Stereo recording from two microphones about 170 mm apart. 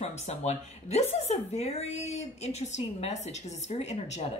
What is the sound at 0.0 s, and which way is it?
Speech, 40° left (ahead or behind).